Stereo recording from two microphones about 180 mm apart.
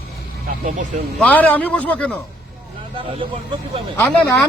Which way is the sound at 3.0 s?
30° right (ahead or behind).